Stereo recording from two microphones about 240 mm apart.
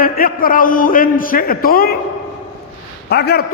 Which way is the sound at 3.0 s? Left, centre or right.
Left.